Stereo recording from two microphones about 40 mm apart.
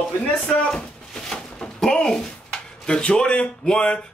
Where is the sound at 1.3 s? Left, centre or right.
Centre.